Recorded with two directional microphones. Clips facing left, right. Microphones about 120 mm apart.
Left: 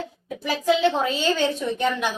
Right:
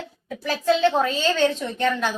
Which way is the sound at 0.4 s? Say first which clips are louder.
Right 1 dB; 15° left (ahead or behind).